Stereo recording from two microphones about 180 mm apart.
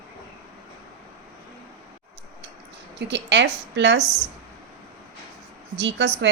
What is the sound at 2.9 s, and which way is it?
A woman's voice, 75° right (ahead or behind).